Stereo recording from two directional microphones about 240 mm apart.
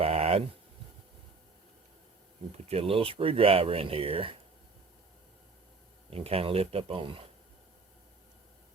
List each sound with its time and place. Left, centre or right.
0.0 s a sound: right
2.6 s speech: right
6.1 s speech: right